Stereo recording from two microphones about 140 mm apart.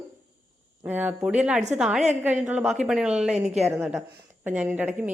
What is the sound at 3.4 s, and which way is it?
Speech, 55° right (ahead or behind).